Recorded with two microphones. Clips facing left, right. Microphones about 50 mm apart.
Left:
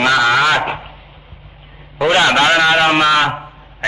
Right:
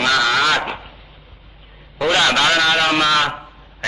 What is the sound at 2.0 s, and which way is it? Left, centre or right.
A man's voice, left.